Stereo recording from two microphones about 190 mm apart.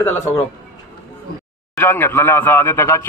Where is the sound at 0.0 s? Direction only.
10° left (ahead or behind).